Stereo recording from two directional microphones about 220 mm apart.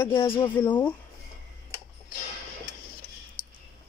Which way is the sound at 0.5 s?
10° left (ahead or behind).